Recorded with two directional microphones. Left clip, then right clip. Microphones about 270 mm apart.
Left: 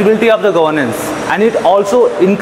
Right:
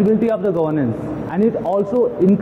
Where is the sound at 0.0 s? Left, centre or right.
Centre.